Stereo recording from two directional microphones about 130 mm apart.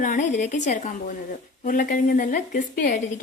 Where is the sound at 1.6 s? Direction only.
90° left.